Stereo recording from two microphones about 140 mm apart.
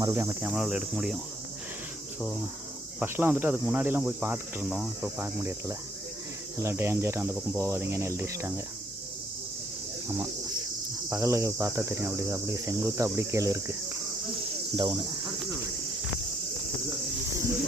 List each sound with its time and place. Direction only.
0.0 s cricket: 20° right (ahead or behind)
0.4 s speech: 5° right (ahead or behind)
3.0 s speech: 15° right (ahead or behind)
4.7 s speech: 5° right (ahead or behind)
5.2 s speech: 15° right (ahead or behind)
6.6 s cricket: 20° right (ahead or behind)
11.1 s cricket: 20° right (ahead or behind)
14.8 s speech: 35° right (ahead or behind)